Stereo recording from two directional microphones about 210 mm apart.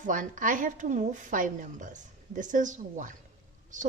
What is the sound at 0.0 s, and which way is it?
A woman's voice, 40° right (ahead or behind).